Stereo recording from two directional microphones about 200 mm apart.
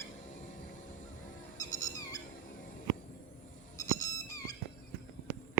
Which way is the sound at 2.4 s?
40° left (ahead or behind).